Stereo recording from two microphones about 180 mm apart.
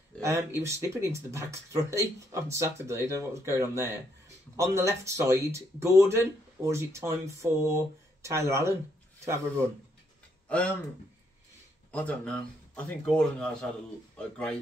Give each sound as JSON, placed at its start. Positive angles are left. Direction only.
{"t": 0.2, "sound": "speech", "side_deg": -15}
{"t": 10.5, "sound": "speech", "side_deg": 5}
{"t": 11.9, "sound": "speech", "side_deg": 5}